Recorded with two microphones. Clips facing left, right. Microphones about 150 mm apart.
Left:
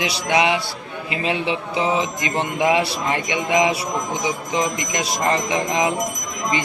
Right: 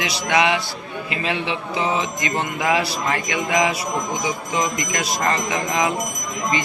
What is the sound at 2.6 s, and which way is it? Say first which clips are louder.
Music: left 3 dB; 25° left (ahead or behind).